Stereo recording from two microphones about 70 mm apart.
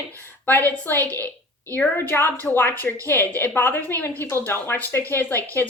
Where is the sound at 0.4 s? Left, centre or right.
Left.